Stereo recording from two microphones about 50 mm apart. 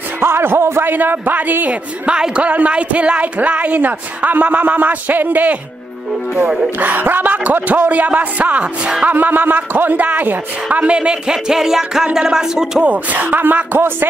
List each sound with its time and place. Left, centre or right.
0.2 s speech: right
0.8 s speech: right
1.7 s speech: centre
6.8 s speech: right
9.0 s speech: right
10.8 s speech: right
12.8 s speech: right